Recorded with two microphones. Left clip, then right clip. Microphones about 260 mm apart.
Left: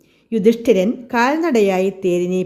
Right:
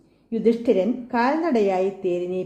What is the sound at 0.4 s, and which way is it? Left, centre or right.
A woman's voice, left.